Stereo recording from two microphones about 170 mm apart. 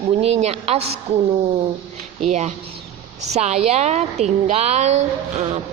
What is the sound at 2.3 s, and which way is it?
A woman's voice, 40° right (ahead or behind).